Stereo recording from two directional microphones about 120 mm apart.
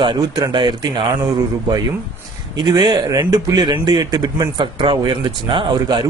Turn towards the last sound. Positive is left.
turn(degrees=-40)  # may be behind; listen again after turning